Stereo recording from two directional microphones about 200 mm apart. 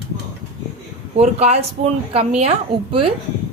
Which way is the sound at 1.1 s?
30° right (ahead or behind).